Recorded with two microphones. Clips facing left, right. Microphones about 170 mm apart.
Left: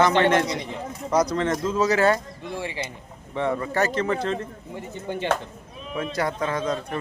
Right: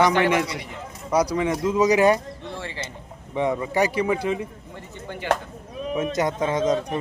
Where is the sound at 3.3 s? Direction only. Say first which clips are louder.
Right 2 dB; 15° right (ahead or behind).